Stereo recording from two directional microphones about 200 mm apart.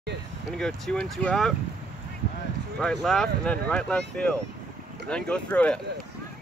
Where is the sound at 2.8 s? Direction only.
Centre (ahead or behind).